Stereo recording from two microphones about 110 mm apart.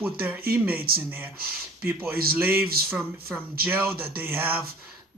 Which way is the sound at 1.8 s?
15° right (ahead or behind).